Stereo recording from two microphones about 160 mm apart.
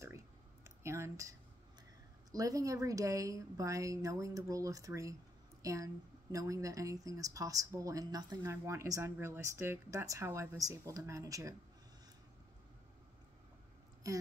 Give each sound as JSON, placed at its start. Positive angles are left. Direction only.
{"t": 0.7, "sound": "speech", "side_deg": -15}
{"t": 2.3, "sound": "speech", "side_deg": -20}